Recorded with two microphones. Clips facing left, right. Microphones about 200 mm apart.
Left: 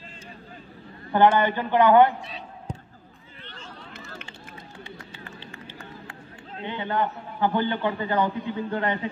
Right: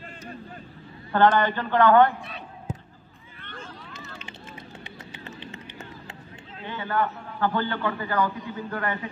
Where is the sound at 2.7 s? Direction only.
5° right (ahead or behind).